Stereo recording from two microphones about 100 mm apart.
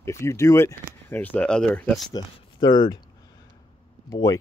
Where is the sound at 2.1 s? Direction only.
50° left (ahead or behind).